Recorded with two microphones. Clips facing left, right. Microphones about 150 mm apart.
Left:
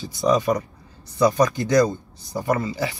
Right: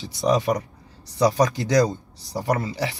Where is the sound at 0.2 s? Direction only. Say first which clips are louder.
Left 1 dB; 20° right (ahead or behind).